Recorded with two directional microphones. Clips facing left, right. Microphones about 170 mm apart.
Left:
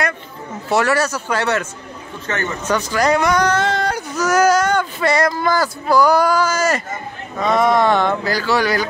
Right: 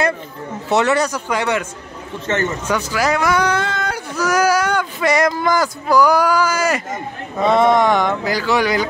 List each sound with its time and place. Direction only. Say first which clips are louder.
0.7 s speech: right 1 dB; 20° right (ahead or behind)
2.2 s speech: right 4 dB; 25° right (ahead or behind)
2.7 s speech: left 4 dB; 10° right (ahead or behind)
7.5 s speech: even; 20° right (ahead or behind)